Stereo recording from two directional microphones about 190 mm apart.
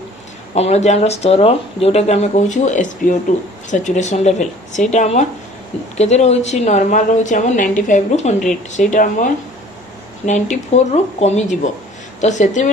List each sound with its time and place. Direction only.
0.6 s a woman's voice: 35° left (ahead or behind)